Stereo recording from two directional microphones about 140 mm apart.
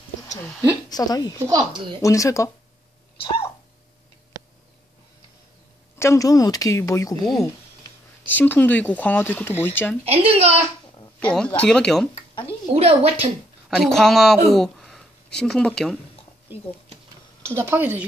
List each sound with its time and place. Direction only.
0.8 s a woman's voice: 25° left (ahead or behind)
1.4 s speech: 30° right (ahead or behind)
2.0 s a woman's voice: 20° left (ahead or behind)
5.9 s a woman's voice: 20° left (ahead or behind)
8.3 s speech: 15° left (ahead or behind)
10.0 s a woman's voice: 45° right (ahead or behind)
11.1 s speech: 10° left (ahead or behind)
12.7 s a woman's voice: 45° right (ahead or behind)
13.7 s speech: centre (ahead or behind)
17.5 s speech: 15° right (ahead or behind)